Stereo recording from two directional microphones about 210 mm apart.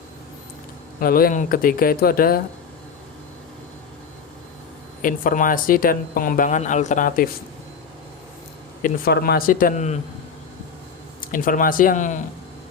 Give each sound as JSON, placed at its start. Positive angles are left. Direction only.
{"t": 0.9, "sound": "speech", "side_deg": 45}
{"t": 5.0, "sound": "speech", "side_deg": 40}
{"t": 8.8, "sound": "speech", "side_deg": 45}
{"t": 11.2, "sound": "speech", "side_deg": 40}